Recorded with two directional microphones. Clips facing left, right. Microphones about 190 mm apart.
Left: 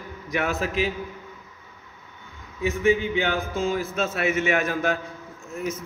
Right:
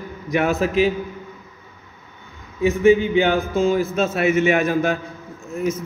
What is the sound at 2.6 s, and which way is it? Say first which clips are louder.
A man's voice: right 7 dB; 25° right (ahead or behind).